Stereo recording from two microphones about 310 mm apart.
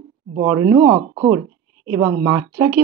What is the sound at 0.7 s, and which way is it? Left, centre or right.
Speech, centre.